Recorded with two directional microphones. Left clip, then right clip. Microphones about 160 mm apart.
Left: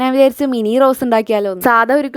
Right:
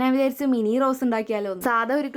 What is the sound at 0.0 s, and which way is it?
A woman's voice, 50° left (ahead or behind).